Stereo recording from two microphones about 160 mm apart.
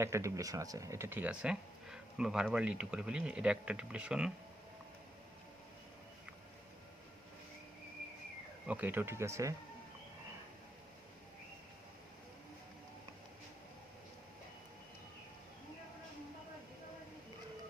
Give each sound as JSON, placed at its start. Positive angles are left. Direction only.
{"t": 0.0, "sound": "speech", "side_deg": -15}
{"t": 8.6, "sound": "speech", "side_deg": -10}